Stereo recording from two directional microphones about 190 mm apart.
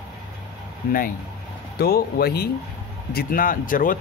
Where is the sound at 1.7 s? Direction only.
55° left (ahead or behind).